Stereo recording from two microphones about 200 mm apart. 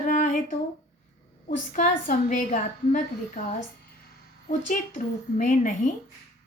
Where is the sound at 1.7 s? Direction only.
40° left (ahead or behind).